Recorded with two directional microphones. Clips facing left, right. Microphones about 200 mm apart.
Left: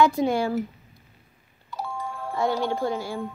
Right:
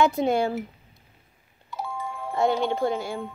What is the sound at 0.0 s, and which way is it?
Speech, 25° right (ahead or behind).